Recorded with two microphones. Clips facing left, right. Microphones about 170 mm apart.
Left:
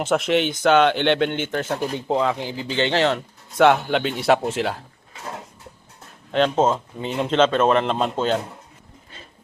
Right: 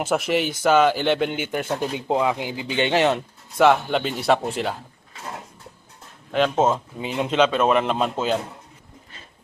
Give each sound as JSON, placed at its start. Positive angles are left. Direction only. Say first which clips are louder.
{"t": 0.0, "sound": "a man's voice", "louder": "left 2 dB", "side_deg": -5}
{"t": 3.6, "sound": "a man's voice", "louder": "left 1 dB", "side_deg": 0}
{"t": 6.3, "sound": "a man's voice", "louder": "left 1 dB", "side_deg": -5}